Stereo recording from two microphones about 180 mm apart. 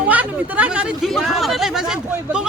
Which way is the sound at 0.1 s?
10° right (ahead or behind).